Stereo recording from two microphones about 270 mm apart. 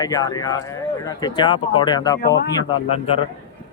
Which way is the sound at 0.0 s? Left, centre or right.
Centre.